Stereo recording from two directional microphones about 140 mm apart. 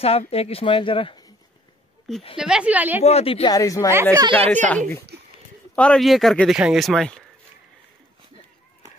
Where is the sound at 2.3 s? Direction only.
5° right (ahead or behind).